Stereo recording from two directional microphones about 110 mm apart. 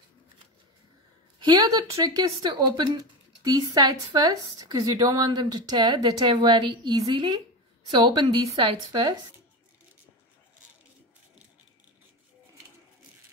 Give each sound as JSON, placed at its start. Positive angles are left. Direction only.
{"t": 1.4, "sound": "a woman's voice", "side_deg": -40}